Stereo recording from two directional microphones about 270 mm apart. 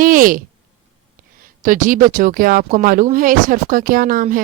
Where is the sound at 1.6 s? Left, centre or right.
Right.